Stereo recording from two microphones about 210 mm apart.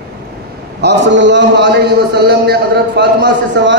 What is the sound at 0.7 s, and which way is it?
A man's voice, 55° right (ahead or behind).